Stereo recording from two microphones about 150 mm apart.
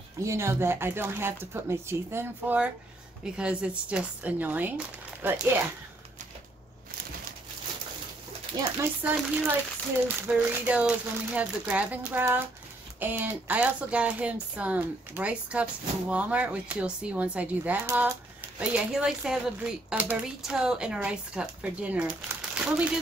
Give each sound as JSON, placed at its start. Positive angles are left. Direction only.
{"t": 0.2, "sound": "speech", "side_deg": -20}
{"t": 9.0, "sound": "speech", "side_deg": -10}